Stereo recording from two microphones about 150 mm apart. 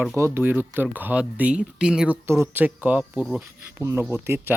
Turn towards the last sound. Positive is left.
turn(degrees=-15)  # may be behind; listen again after turning